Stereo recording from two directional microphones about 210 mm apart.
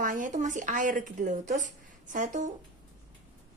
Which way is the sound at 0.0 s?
40° right (ahead or behind).